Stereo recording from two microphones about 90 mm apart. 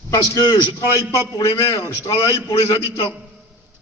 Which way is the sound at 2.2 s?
45° left (ahead or behind).